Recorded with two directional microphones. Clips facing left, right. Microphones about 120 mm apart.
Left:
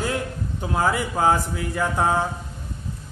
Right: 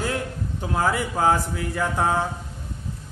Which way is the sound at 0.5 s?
15° left (ahead or behind).